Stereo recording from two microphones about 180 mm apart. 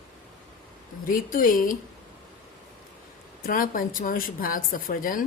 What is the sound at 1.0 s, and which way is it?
Speech, 50° left (ahead or behind).